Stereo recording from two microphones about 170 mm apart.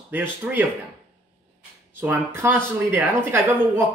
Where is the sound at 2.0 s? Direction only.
15° right (ahead or behind).